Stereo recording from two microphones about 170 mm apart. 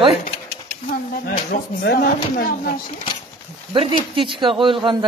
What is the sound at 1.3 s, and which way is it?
Speech, 60° left (ahead or behind).